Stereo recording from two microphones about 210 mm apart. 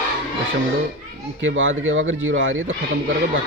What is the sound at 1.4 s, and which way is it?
Speech, 60° right (ahead or behind).